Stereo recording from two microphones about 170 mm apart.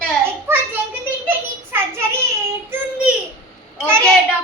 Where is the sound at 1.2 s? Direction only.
15° right (ahead or behind).